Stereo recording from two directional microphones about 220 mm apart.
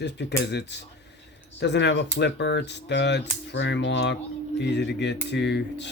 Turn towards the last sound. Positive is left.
turn(degrees=50)  # may be behind; listen again after turning